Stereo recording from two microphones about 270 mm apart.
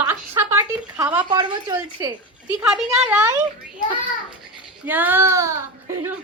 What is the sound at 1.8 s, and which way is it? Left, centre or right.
A woman's voice, centre.